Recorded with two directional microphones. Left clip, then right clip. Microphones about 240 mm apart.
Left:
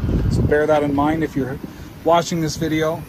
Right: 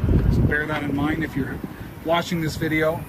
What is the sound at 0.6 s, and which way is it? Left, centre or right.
Mantra, left.